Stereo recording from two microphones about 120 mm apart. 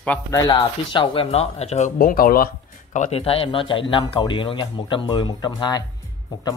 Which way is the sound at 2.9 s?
90° left.